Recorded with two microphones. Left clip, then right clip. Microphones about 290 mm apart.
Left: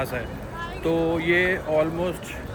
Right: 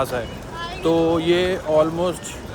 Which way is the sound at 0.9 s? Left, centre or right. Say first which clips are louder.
Right 5 dB; centre.